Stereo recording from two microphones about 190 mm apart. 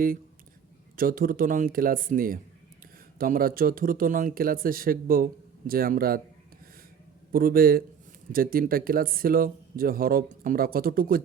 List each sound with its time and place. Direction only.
0.9 s speech: 50° right (ahead or behind)
7.3 s speech: 50° right (ahead or behind)